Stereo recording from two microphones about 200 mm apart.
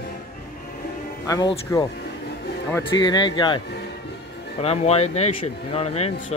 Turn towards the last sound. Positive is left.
turn(degrees=30)  # may be behind; listen again after turning